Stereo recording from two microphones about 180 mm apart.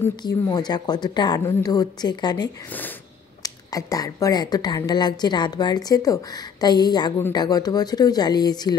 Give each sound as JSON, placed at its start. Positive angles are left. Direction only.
{"t": 0.1, "sound": "speech", "side_deg": 25}